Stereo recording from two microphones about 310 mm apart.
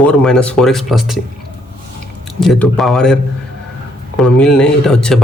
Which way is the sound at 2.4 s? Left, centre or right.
Centre.